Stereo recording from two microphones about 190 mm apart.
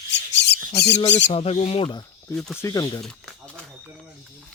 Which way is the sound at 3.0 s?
Centre (ahead or behind).